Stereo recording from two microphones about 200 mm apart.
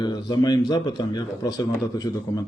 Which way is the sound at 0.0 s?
20° left (ahead or behind).